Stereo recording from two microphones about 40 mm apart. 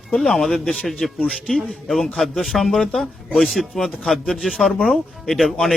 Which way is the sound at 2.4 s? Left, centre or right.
Centre.